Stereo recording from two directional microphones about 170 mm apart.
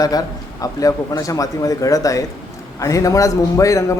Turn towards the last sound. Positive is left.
turn(degrees=20)  # may be behind; listen again after turning